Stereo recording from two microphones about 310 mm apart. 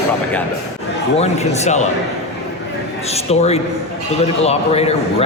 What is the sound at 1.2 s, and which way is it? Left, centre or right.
Speech, left.